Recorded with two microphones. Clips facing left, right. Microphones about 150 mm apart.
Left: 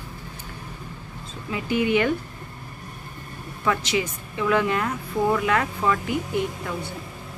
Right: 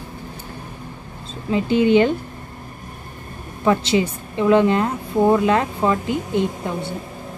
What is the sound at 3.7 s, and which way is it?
A woman's voice, 30° right (ahead or behind).